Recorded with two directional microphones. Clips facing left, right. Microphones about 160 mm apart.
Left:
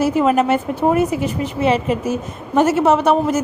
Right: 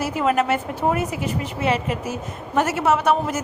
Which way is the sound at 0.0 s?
20° left (ahead or behind).